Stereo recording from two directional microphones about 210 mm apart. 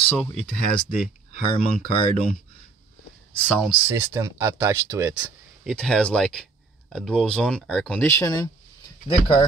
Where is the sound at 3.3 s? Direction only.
5° left (ahead or behind).